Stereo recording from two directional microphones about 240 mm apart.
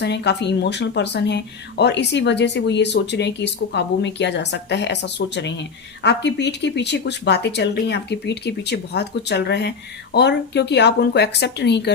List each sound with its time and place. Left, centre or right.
0.0 s speech: left